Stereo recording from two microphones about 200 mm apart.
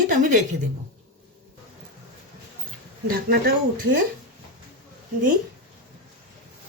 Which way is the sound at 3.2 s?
50° right (ahead or behind).